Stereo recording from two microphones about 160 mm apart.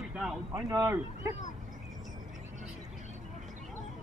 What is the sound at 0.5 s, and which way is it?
Speech, 20° right (ahead or behind).